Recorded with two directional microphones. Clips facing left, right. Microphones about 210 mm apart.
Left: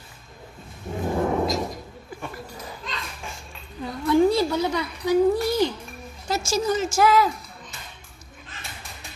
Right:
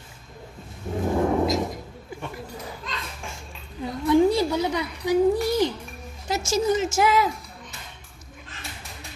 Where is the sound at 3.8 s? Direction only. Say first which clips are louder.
Even; 15° right (ahead or behind).